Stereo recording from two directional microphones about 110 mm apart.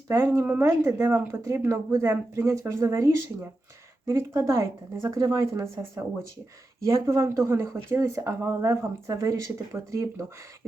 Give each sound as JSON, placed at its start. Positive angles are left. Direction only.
{"t": 0.1, "sound": "speech", "side_deg": -25}
{"t": 6.8, "sound": "speech", "side_deg": -25}